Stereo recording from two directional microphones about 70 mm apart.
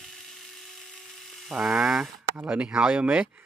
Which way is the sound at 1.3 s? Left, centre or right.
Centre.